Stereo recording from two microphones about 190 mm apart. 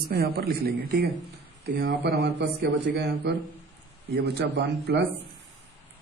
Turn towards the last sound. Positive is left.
turn(degrees=-60)  # may be behind; listen again after turning